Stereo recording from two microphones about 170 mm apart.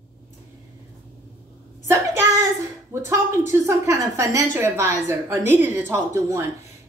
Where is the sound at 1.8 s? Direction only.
20° right (ahead or behind).